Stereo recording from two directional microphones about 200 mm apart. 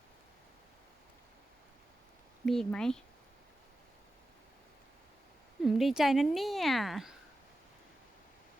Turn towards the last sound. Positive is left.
turn(degrees=0)  # may be behind; listen again after turning